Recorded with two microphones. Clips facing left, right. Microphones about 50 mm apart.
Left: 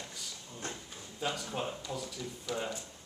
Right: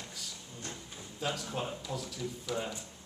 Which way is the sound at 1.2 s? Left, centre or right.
Centre.